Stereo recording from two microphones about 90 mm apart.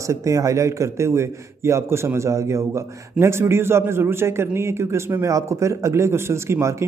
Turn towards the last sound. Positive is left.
turn(degrees=-30)  # may be behind; listen again after turning